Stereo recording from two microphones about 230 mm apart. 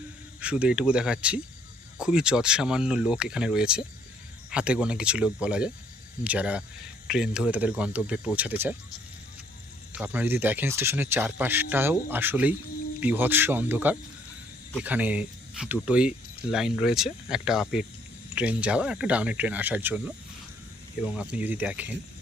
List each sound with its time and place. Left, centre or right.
0.3 s speech: centre
9.9 s speech: centre